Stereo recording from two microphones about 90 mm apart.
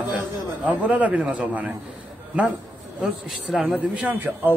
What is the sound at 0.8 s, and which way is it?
Speech, 15° right (ahead or behind).